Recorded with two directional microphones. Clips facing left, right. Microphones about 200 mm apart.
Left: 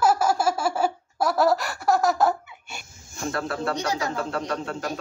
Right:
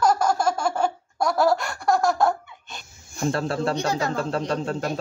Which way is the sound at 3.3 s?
30° right (ahead or behind).